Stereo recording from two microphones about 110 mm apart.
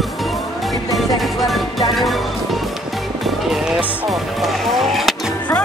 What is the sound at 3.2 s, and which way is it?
Music, centre (ahead or behind).